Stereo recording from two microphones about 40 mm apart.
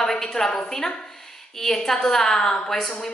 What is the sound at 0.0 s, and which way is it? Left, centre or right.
A woman's voice, centre.